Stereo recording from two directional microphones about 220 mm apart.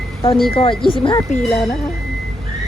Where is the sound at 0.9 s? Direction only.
25° left (ahead or behind).